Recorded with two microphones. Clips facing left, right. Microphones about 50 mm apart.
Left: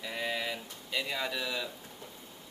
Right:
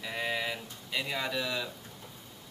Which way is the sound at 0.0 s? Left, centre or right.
Centre.